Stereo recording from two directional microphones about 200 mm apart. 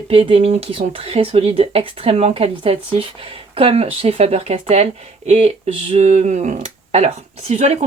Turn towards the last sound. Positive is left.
turn(degrees=-35)  # may be behind; listen again after turning